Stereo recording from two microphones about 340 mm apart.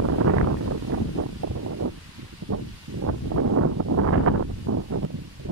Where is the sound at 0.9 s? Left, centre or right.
Right.